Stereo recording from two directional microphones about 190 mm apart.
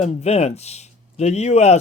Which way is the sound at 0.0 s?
35° left (ahead or behind).